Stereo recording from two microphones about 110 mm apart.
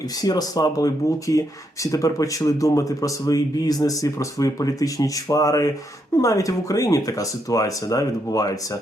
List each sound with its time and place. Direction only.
0.2 s speech: 35° left (ahead or behind)